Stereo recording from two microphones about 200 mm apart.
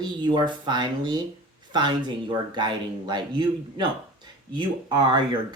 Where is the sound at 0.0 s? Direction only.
20° right (ahead or behind).